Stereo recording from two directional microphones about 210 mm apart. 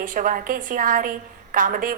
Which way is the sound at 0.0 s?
40° right (ahead or behind).